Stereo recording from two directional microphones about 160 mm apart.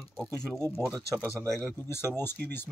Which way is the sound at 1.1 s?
Centre (ahead or behind).